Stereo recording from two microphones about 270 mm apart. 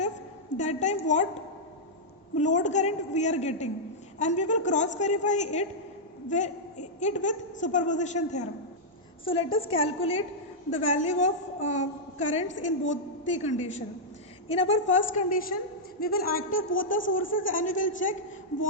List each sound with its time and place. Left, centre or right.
0.5 s a woman's voice: left
2.4 s a woman's voice: left
16.6 s speech: left
17.4 s a woman's voice: left